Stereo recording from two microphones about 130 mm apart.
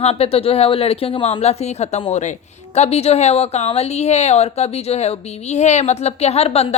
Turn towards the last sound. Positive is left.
turn(degrees=50)  # may be behind; listen again after turning